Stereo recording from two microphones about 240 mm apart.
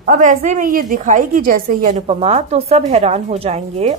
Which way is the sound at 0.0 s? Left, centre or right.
Right.